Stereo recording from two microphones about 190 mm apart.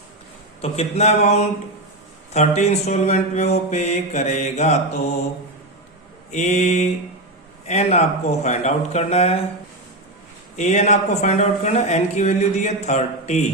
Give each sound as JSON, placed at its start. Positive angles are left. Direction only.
{"t": 0.6, "sound": "speech", "side_deg": 35}
{"t": 2.6, "sound": "speech", "side_deg": 35}
{"t": 6.3, "sound": "speech", "side_deg": 35}
{"t": 10.6, "sound": "speech", "side_deg": 35}